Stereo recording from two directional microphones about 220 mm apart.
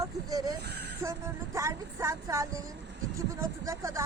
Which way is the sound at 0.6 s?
50° right (ahead or behind).